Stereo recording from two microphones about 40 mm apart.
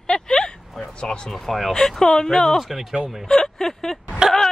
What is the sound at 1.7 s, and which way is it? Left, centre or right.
Speech, centre.